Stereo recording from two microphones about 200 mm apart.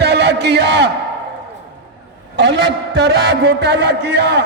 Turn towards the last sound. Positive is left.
turn(degrees=-55)  # may be behind; listen again after turning